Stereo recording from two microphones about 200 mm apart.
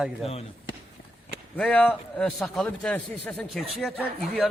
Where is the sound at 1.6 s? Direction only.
5° left (ahead or behind).